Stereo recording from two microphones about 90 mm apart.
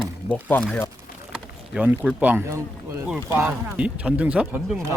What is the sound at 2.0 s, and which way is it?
Speech, 15° right (ahead or behind).